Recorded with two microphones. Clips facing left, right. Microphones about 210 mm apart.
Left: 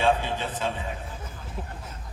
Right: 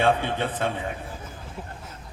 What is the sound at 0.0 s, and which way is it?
Speech, 60° right (ahead or behind).